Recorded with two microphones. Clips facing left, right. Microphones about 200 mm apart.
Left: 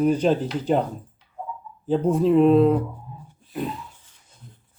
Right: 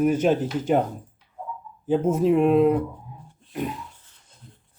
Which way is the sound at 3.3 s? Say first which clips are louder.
Even; centre (ahead or behind).